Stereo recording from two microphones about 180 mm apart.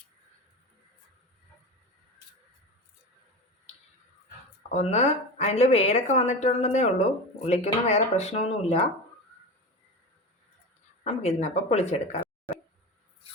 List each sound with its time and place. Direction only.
4.7 s a woman's voice: 40° left (ahead or behind)
11.0 s a woman's voice: 40° left (ahead or behind)